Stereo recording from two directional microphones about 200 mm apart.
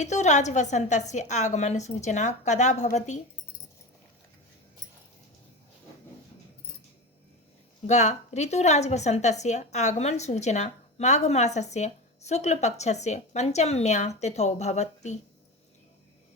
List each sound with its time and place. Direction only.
0.0 s a woman's voice: 35° left (ahead or behind)
7.9 s a woman's voice: 35° left (ahead or behind)